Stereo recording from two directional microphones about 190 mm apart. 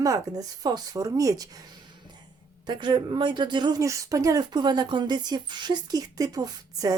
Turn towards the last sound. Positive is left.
turn(degrees=-20)  # may be behind; listen again after turning